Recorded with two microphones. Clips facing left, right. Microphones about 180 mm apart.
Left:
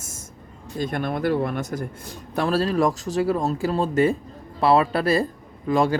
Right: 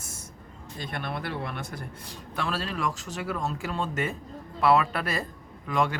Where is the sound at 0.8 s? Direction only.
45° left (ahead or behind).